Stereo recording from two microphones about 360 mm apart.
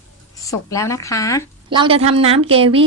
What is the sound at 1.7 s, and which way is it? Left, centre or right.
A woman's voice, centre.